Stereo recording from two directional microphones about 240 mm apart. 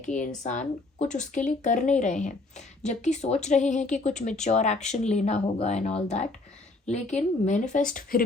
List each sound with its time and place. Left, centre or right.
0.0 s speech: left
7.4 s speech: left